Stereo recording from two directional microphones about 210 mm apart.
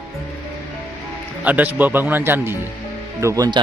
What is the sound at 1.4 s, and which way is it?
A man's voice, 10° right (ahead or behind).